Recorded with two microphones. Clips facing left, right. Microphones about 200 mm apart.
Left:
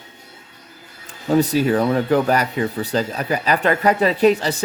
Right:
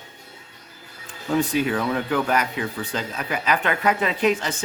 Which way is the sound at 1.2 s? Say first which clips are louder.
Left 5 dB; 40° left (ahead or behind).